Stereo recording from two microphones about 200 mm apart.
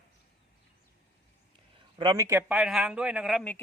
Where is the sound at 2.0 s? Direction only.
20° right (ahead or behind).